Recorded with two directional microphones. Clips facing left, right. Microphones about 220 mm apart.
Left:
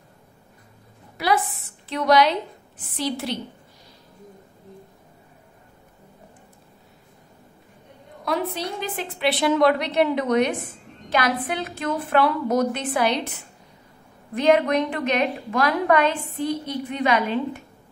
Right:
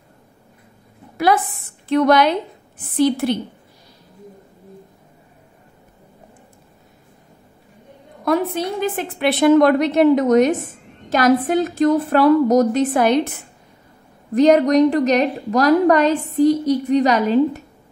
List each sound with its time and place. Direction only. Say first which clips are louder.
1.1 s a sound: right 5 dB; 50° right (ahead or behind)
1.9 s a woman's voice: right 4 dB; 50° right (ahead or behind)
8.3 s a woman's voice: right 7 dB; 50° right (ahead or behind)
14.3 s a woman's voice: right 6 dB; 40° right (ahead or behind)